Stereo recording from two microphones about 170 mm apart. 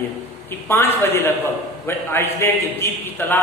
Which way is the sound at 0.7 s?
15° left (ahead or behind).